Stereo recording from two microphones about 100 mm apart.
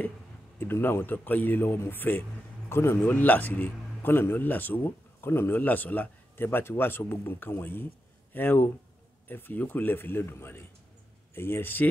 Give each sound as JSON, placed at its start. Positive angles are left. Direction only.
{"t": 0.6, "sound": "a man's voice", "side_deg": 20}